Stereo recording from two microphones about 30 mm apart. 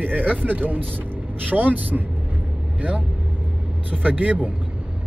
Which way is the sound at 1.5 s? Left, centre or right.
Right.